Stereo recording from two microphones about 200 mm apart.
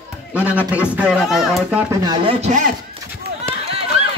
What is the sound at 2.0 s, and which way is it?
Speech, 25° right (ahead or behind).